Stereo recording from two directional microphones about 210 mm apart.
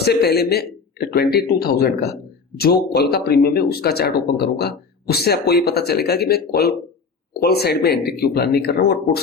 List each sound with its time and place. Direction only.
0.0 s speech: 50° left (ahead or behind)